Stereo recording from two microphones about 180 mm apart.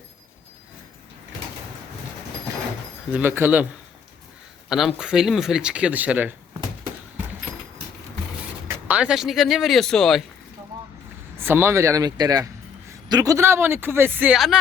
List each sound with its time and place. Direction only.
3.1 s speech: 10° right (ahead or behind)
4.7 s speech: centre (ahead or behind)
8.9 s speech: 5° right (ahead or behind)
11.3 s speech: 15° right (ahead or behind)